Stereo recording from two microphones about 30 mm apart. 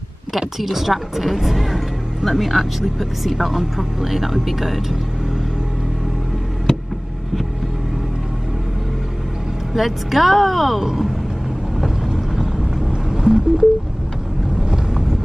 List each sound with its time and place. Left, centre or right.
0.3 s speech: centre
9.8 s speech: centre
12.5 s vehicle: centre
12.9 s a sound: right
14.6 s vehicle: right